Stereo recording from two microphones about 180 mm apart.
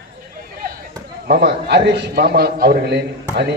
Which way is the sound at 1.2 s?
65° right (ahead or behind).